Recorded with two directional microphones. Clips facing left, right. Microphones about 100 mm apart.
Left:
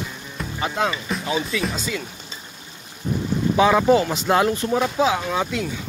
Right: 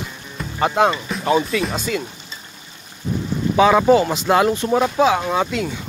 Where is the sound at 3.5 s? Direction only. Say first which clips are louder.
Right 3 dB; 90° right.